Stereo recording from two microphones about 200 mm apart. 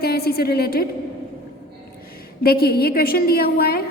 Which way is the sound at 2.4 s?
50° left (ahead or behind).